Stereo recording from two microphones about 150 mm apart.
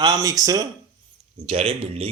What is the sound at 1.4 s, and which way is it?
Speech, 40° right (ahead or behind).